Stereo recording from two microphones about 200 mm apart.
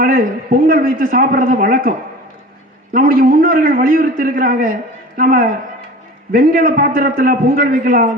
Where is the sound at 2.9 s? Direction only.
45° right (ahead or behind).